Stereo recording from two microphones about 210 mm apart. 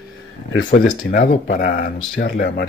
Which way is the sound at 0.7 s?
40° left (ahead or behind).